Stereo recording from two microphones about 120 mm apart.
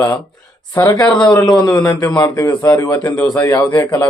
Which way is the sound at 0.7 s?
15° left (ahead or behind).